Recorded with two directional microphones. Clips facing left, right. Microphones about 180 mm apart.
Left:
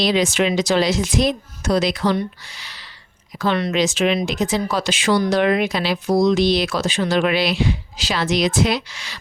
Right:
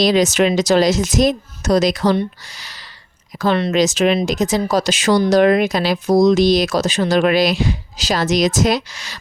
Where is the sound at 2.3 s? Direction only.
40° right (ahead or behind).